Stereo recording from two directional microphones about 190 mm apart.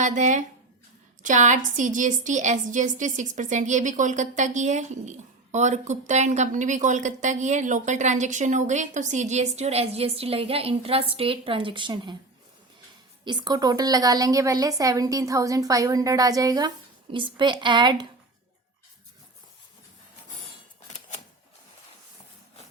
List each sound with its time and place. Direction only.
0.0 s a woman's voice: 40° right (ahead or behind); by 12.1 s 25° right (ahead or behind)
13.2 s a woman's voice: 20° right (ahead or behind)